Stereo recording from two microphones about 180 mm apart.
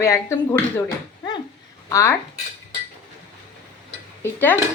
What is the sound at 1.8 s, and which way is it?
Speech, 15° left (ahead or behind).